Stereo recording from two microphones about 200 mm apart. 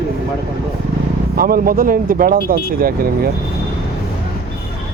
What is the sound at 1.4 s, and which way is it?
Speech, 45° right (ahead or behind).